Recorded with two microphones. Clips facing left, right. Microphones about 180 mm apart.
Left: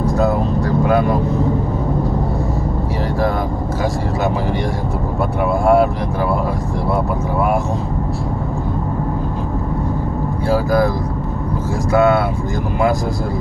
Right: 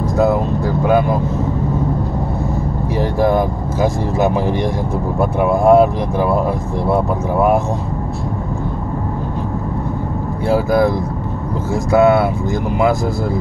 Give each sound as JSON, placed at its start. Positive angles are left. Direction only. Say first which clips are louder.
{"t": 3.2, "sound": "speech", "louder": "right 5 dB", "side_deg": -20}
{"t": 5.4, "sound": "speech", "louder": "right 3 dB", "side_deg": -20}
{"t": 10.5, "sound": "speech", "louder": "right 2 dB", "side_deg": -20}
{"t": 11.9, "sound": "speech", "louder": "right 2 dB", "side_deg": -20}